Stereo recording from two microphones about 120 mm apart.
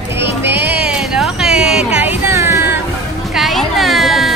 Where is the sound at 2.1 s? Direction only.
25° right (ahead or behind).